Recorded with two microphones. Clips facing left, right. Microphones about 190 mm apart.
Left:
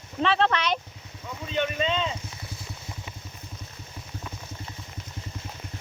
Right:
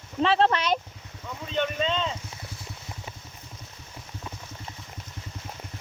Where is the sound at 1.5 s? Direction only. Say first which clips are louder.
Even; 10° left (ahead or behind).